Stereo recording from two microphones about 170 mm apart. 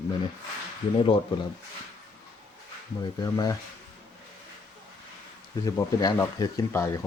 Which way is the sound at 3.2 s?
25° left (ahead or behind).